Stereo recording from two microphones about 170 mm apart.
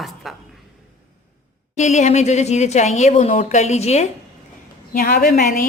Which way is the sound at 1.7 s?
45° left (ahead or behind).